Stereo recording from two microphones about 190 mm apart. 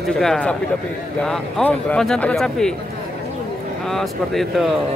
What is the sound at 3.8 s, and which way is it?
Speech, centre (ahead or behind).